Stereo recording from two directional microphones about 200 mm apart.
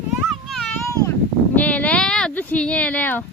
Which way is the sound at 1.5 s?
5° left (ahead or behind).